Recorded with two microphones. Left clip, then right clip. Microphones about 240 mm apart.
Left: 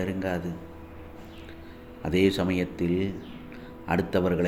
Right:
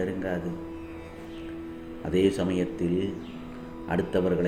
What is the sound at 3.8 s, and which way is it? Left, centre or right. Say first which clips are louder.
Speech: left 1 dB; left.